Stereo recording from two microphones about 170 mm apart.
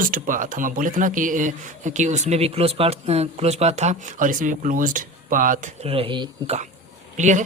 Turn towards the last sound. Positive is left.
turn(degrees=-45)  # may be behind; listen again after turning